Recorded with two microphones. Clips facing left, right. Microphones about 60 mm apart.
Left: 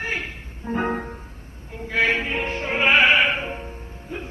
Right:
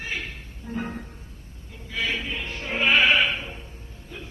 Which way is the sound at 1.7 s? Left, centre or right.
Left.